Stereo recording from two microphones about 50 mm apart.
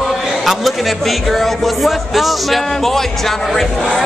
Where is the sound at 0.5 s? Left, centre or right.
Centre.